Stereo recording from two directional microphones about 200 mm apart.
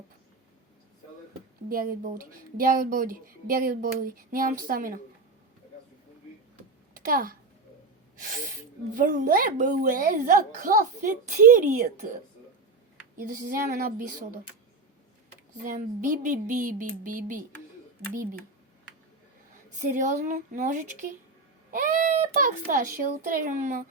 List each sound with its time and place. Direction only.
1.7 s speech: 45° right (ahead or behind)
6.9 s a woman's voice: 45° right (ahead or behind)
9.0 s speech: 40° right (ahead or behind)
13.1 s speech: 45° right (ahead or behind)
15.6 s a child's voice: 40° right (ahead or behind)
19.7 s a child's voice: 40° right (ahead or behind)